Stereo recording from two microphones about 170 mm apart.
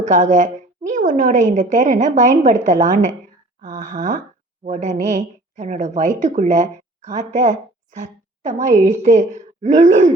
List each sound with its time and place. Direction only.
0.0 s a woman's voice: 45° right (ahead or behind)